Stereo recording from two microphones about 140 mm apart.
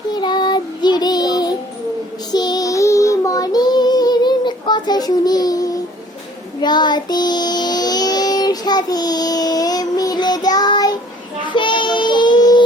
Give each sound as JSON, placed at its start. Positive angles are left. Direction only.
{"t": 0.1, "sound": "child singing", "side_deg": 30}